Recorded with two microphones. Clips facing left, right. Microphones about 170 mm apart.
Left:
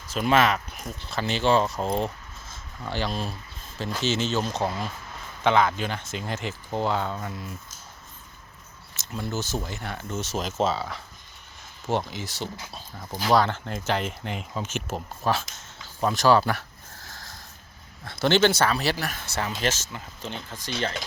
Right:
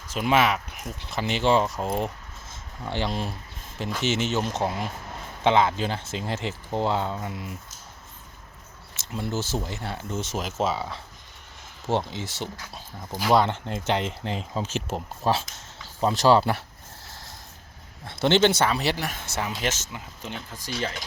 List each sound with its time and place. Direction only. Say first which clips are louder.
0.1 s speech: left 1 dB; 15° right (ahead or behind)
2.5 s speech: right 1 dB; 25° right (ahead or behind)
9.0 s speech: right 1 dB; 25° right (ahead or behind)
10.3 s speech: left 2 dB; 10° right (ahead or behind)
11.9 s speech: right 1 dB; 25° right (ahead or behind)
13.1 s speech: right 1 dB; 5° right (ahead or behind)
13.3 s speech: even; 20° right (ahead or behind)
16.0 s a sound: right 1 dB; 25° right (ahead or behind)
18.0 s speech: right 1 dB; 25° right (ahead or behind)